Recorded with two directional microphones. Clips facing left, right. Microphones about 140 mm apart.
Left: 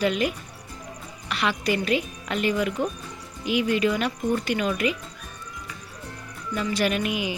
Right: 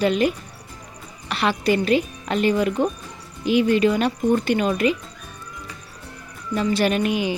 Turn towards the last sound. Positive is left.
turn(degrees=-35)  # may be behind; listen again after turning